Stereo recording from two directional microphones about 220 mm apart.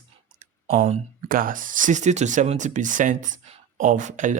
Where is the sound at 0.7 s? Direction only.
30° right (ahead or behind).